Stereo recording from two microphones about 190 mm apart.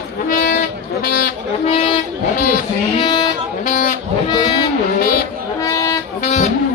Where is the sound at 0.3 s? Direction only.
45° left (ahead or behind).